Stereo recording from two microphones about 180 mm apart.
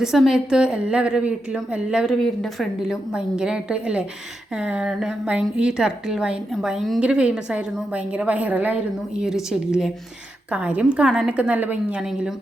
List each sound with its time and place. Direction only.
0.0 s a woman's voice: centre (ahead or behind)